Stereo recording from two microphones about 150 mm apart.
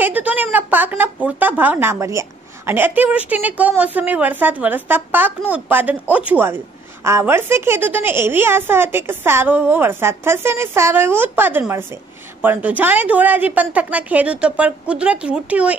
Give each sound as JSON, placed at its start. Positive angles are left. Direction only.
{"t": 0.0, "sound": "a woman's voice", "side_deg": -10}